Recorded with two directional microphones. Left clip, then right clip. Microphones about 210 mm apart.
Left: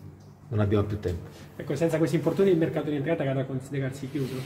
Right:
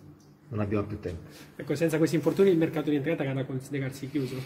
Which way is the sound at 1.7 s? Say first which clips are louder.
Left 1 dB; 50° right (ahead or behind).